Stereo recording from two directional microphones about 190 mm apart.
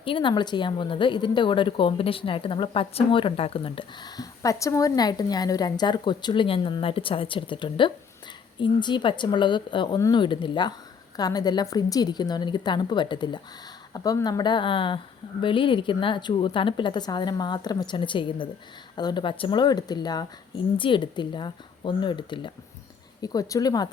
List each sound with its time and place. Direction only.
0.0 s a woman's voice: 25° left (ahead or behind)